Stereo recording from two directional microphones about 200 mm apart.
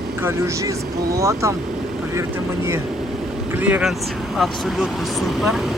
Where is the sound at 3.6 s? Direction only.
5° right (ahead or behind).